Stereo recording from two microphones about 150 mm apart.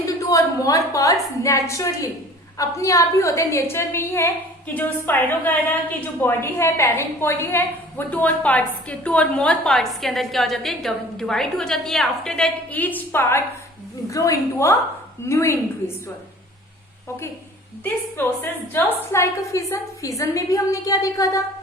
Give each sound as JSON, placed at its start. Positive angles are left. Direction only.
{"t": 0.2, "sound": "a woman's voice", "side_deg": 20}
{"t": 18.7, "sound": "a woman's voice", "side_deg": 15}